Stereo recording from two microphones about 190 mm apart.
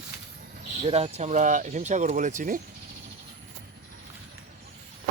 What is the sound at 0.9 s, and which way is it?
Speech, 30° right (ahead or behind).